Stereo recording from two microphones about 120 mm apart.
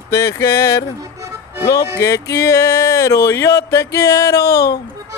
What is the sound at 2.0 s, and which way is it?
Speech, 25° left (ahead or behind).